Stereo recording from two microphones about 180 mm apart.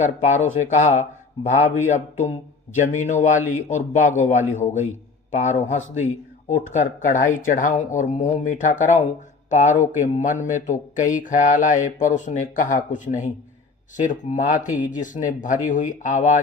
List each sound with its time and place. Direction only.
0.0 s speech: 40° left (ahead or behind)